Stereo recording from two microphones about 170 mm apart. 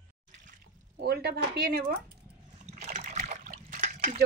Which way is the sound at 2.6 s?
40° right (ahead or behind).